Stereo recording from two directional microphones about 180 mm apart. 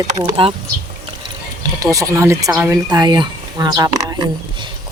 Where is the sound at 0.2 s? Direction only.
30° right (ahead or behind).